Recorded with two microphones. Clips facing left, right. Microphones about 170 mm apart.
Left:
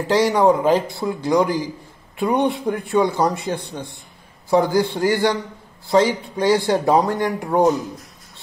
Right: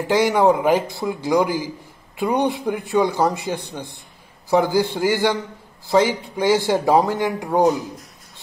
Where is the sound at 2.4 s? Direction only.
20° right (ahead or behind).